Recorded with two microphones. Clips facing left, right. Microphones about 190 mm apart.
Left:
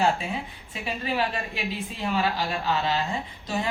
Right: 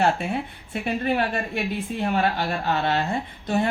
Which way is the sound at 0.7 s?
55° right (ahead or behind).